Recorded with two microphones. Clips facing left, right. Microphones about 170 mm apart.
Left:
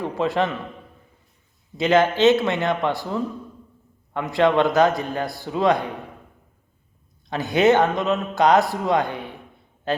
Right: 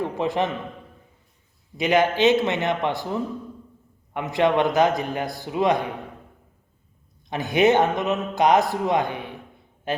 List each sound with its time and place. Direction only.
0.0 s speech: 15° right (ahead or behind)
1.8 s a man's voice: 15° right (ahead or behind)
7.3 s speech: 20° right (ahead or behind)